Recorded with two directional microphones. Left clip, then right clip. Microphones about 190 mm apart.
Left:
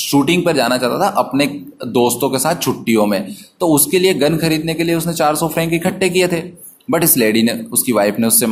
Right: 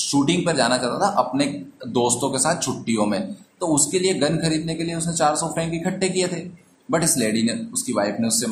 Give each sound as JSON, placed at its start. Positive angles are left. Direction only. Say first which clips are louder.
{"t": 0.0, "sound": "speech", "louder": "left 7 dB", "side_deg": 30}